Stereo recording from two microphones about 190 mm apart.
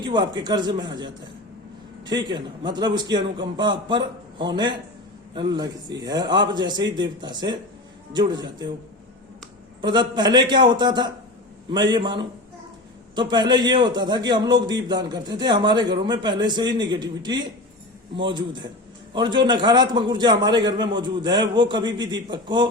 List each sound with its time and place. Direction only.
0.0 s a man's voice: 25° right (ahead or behind)
9.8 s a man's voice: 25° right (ahead or behind)